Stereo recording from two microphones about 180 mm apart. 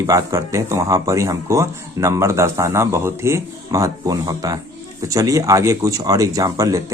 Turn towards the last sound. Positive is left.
turn(degrees=-20)  # may be behind; listen again after turning